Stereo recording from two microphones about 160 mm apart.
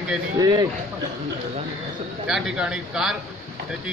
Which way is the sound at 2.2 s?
5° right (ahead or behind).